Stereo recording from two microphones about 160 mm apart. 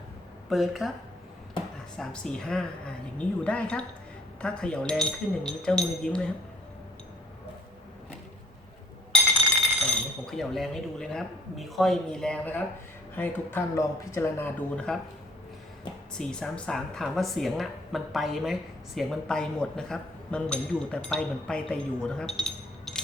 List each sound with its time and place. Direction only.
0.5 s speech: centre (ahead or behind)
2.0 s speech: 5° left (ahead or behind)
9.8 s speech: 5° left (ahead or behind)
16.1 s speech: 5° left (ahead or behind)